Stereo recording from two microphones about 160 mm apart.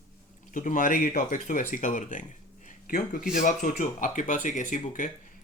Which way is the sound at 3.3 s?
55° left (ahead or behind).